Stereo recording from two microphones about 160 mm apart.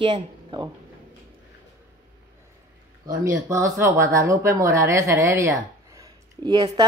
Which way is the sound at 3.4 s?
20° right (ahead or behind).